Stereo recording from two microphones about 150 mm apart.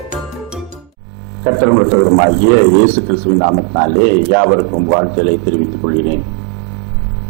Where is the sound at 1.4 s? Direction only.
20° right (ahead or behind).